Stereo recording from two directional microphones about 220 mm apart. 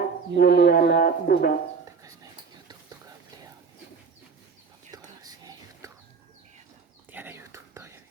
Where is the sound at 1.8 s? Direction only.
15° right (ahead or behind).